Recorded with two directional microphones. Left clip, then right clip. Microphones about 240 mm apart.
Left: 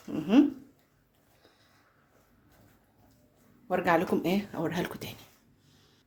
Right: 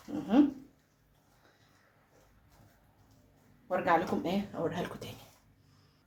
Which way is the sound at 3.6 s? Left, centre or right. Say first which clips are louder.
Left 2 dB; left.